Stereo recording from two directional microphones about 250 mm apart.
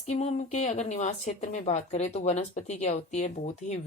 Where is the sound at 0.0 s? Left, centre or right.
Left.